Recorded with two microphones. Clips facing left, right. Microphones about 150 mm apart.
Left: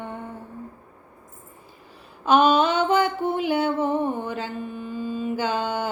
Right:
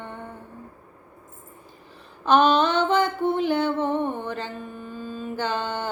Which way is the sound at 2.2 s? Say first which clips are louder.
Left 1 dB; 5° left (ahead or behind).